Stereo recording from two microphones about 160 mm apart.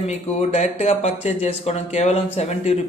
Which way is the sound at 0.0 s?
45° left (ahead or behind).